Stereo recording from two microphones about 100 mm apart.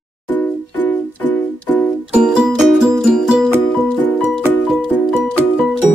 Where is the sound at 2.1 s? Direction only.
5° right (ahead or behind).